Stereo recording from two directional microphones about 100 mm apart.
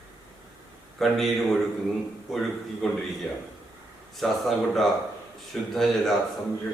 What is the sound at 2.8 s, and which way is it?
Speech, 5° left (ahead or behind).